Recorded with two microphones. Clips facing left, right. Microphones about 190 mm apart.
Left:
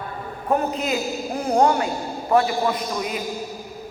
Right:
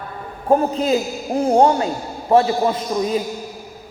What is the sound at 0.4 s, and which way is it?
A man's voice, 30° right (ahead or behind).